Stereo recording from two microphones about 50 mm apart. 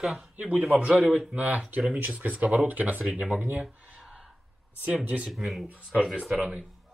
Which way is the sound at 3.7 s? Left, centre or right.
Right.